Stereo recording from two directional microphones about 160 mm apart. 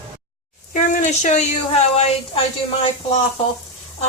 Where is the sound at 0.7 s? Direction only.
50° left (ahead or behind).